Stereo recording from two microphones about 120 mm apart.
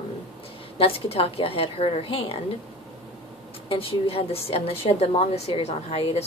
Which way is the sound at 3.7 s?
50° left (ahead or behind).